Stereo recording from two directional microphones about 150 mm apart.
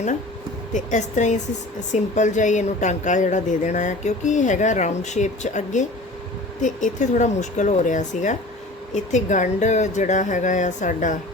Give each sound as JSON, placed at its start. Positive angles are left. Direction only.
{"t": 0.7, "sound": "a woman's voice", "side_deg": 55}